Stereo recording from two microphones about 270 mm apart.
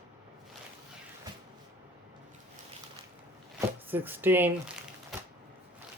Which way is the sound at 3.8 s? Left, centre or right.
Centre.